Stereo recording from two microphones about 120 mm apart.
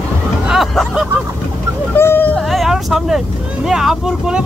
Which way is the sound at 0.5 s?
5° right (ahead or behind).